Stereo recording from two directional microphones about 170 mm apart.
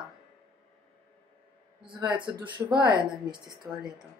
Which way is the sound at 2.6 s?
10° right (ahead or behind).